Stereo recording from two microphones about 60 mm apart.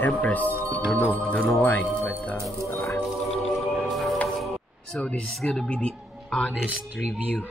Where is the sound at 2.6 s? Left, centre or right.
Left.